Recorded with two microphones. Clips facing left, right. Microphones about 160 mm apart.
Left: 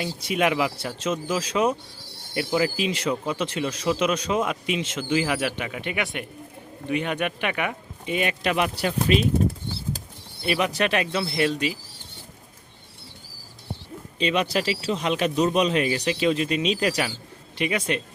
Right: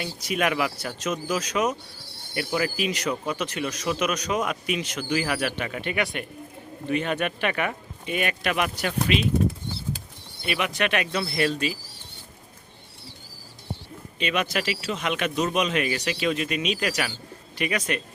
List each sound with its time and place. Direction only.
0.0 s speech: 25° left (ahead or behind)
10.4 s speech: 35° left (ahead or behind); by 11.8 s 20° left (ahead or behind)
14.2 s speech: 30° left (ahead or behind)